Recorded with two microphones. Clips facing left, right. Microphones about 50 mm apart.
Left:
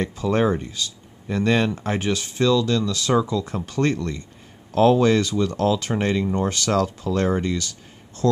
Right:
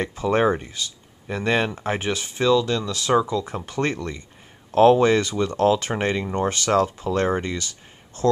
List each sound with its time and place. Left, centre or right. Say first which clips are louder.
0.1 s speech: right 3 dB; right
4.6 s speech: right 2 dB; right